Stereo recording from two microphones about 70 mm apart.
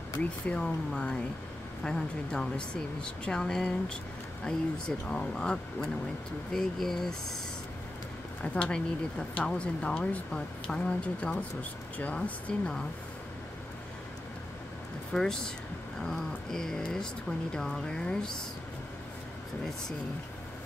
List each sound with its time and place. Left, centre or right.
0.2 s speech: centre
8.5 s speech: centre
15.1 s speech: centre